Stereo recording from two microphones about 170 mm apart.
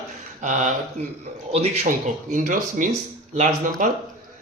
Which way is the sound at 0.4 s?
45° right (ahead or behind).